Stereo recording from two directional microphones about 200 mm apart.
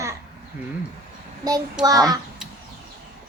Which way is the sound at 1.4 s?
20° right (ahead or behind).